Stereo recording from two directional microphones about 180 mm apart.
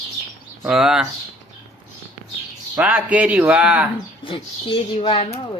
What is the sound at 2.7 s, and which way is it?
Speech, 10° right (ahead or behind).